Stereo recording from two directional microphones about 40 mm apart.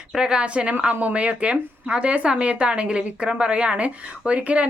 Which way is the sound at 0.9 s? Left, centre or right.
Right.